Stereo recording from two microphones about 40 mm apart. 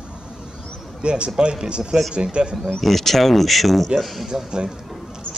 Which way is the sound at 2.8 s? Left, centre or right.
Centre.